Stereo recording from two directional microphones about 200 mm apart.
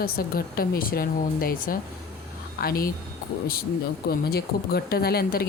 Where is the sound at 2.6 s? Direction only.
50° left (ahead or behind).